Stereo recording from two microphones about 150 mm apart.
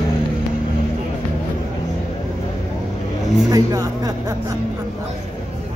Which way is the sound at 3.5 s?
25° right (ahead or behind).